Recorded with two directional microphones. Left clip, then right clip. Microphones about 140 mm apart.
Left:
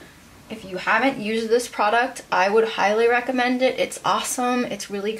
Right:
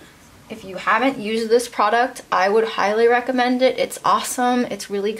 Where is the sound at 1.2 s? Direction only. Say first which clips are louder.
Right 3 dB; 50° right (ahead or behind).